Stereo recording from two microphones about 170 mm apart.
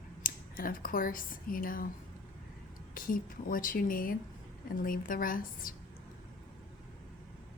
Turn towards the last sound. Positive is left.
turn(degrees=55)  # may be behind; listen again after turning